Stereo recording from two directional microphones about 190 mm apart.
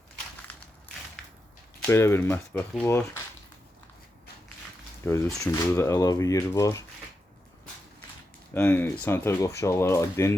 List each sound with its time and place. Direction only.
1.9 s speech: 15° left (ahead or behind)
5.0 s speech: 15° left (ahead or behind)
8.5 s speech: 10° left (ahead or behind)